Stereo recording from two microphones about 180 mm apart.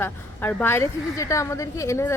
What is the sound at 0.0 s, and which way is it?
A woman's voice, 10° left (ahead or behind).